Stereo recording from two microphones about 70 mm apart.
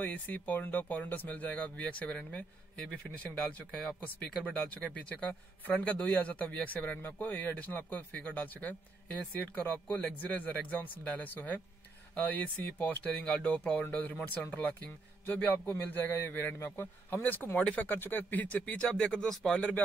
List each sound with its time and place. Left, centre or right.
0.0 s a man's voice: left; by 19.6 s centre